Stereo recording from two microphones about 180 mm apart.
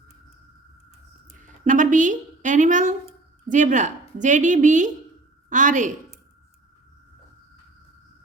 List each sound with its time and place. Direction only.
1.3 s a woman's voice: 45° right (ahead or behind)